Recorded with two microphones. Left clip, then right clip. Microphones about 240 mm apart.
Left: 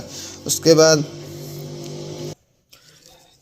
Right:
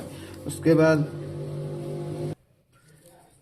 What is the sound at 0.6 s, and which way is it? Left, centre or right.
Speech, left.